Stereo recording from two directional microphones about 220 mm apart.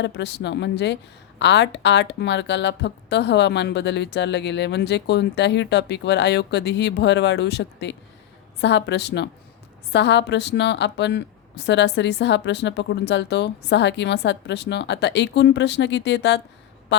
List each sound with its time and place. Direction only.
0.0 s a woman's voice: 50° left (ahead or behind)